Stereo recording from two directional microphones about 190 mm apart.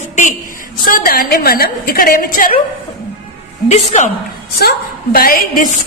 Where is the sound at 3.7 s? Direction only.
35° left (ahead or behind).